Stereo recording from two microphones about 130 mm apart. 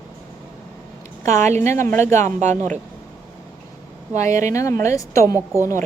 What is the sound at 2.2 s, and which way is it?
Speech, 65° right (ahead or behind).